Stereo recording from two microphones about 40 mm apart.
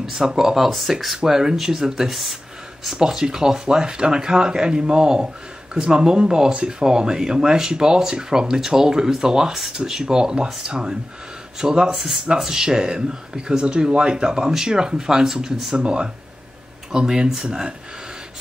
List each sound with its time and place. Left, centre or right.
0.0 s speech: centre
0.7 s speech: centre
1.1 s speech: centre
15.7 s speech: right